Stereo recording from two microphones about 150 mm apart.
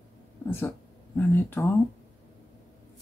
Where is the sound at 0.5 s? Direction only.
15° left (ahead or behind).